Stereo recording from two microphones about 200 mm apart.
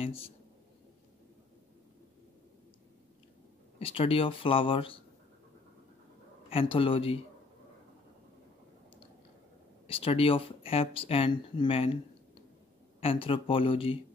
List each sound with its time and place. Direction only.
0.0 s speech: 30° left (ahead or behind)
3.8 s speech: 30° left (ahead or behind)
6.5 s speech: 25° left (ahead or behind)
9.8 s speech: 25° left (ahead or behind)
13.0 s speech: 25° left (ahead or behind)